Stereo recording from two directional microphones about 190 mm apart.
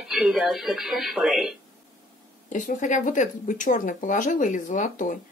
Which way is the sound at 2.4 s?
40° left (ahead or behind).